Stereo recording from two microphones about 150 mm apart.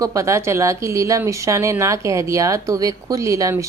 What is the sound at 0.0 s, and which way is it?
Speech, 20° right (ahead or behind).